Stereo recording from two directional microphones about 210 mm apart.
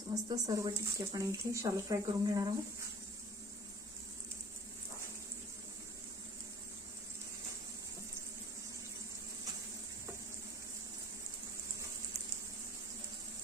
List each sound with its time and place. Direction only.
0.1 s speech: 20° right (ahead or behind)